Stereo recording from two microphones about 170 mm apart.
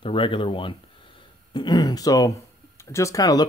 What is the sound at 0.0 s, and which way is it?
Speech, 30° left (ahead or behind).